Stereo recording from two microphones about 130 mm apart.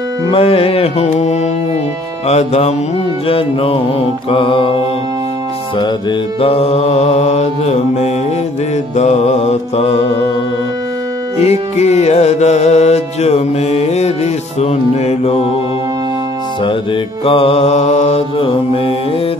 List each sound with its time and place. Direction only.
0.3 s mantra: 45° left (ahead or behind)
2.2 s music: 55° left (ahead or behind)
3.3 s mantra: 45° left (ahead or behind)
6.4 s music: 50° left (ahead or behind)
11.3 s music: 60° left (ahead or behind)
16.6 s mantra: 45° left (ahead or behind)